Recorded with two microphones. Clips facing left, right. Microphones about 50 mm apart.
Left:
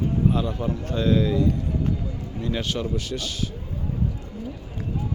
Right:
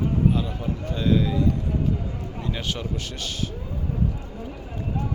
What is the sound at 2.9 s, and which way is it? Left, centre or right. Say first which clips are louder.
Speech: left 2 dB; right.